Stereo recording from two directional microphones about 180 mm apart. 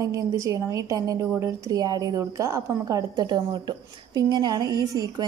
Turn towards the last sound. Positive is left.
turn(degrees=-20)  # may be behind; listen again after turning